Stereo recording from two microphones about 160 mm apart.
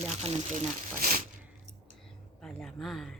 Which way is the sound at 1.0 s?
60° right (ahead or behind).